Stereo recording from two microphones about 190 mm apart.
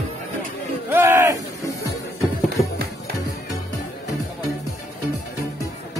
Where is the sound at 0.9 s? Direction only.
10° right (ahead or behind).